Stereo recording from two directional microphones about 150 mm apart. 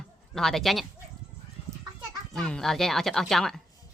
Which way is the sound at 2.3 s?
5° left (ahead or behind).